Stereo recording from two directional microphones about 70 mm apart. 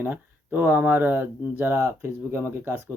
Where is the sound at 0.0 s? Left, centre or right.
Right.